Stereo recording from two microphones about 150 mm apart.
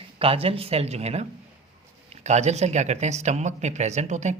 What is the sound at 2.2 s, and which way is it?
A man's voice, 50° right (ahead or behind).